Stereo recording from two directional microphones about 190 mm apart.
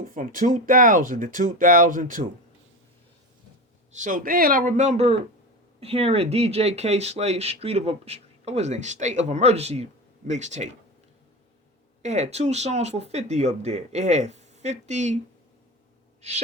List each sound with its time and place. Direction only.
0.0 s speech: 45° right (ahead or behind)
3.9 s speech: 45° right (ahead or behind)
12.0 s speech: 35° right (ahead or behind)